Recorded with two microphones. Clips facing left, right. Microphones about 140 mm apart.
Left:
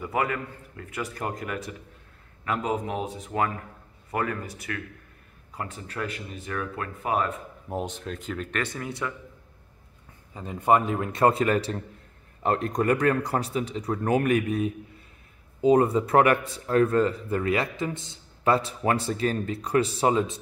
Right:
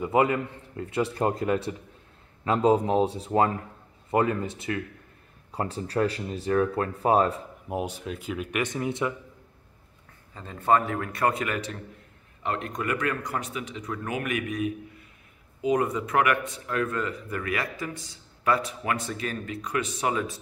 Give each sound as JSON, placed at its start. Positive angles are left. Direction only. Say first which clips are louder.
{"t": 0.0, "sound": "a man's voice", "louder": "right 5 dB", "side_deg": -20}
{"t": 7.7, "sound": "speech", "louder": "right 1 dB", "side_deg": -10}
{"t": 10.3, "sound": "a man's voice", "louder": "left 1 dB", "side_deg": 15}